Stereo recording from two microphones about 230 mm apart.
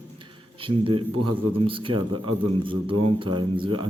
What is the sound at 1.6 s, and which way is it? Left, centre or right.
Speech, right.